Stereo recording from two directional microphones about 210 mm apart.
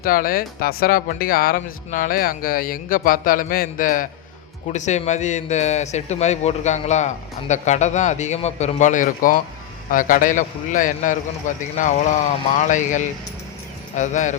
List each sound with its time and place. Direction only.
0.0 s speech: 45° left (ahead or behind)